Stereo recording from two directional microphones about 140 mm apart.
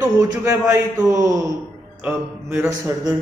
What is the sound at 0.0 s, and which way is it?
A man's voice, 25° right (ahead or behind).